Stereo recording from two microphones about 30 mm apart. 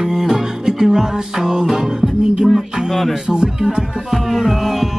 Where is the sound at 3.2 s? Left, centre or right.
Right.